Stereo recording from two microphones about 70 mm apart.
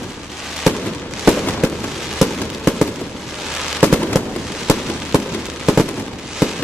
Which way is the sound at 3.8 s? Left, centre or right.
Centre.